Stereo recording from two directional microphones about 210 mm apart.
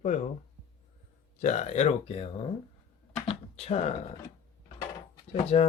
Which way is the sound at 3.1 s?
30° left (ahead or behind).